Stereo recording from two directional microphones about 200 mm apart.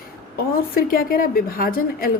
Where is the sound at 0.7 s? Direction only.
45° left (ahead or behind).